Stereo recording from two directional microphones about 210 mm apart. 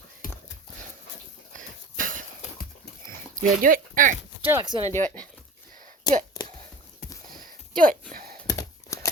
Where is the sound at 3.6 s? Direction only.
40° right (ahead or behind).